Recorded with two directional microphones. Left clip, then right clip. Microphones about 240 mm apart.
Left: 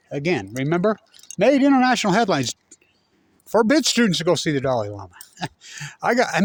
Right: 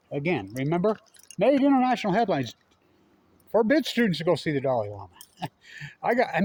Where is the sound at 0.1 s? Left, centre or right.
Left.